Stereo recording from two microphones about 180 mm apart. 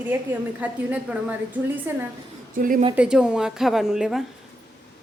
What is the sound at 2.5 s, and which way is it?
Speech, 50° right (ahead or behind).